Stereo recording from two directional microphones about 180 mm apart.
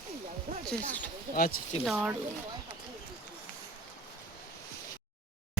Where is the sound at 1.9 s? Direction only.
5° right (ahead or behind).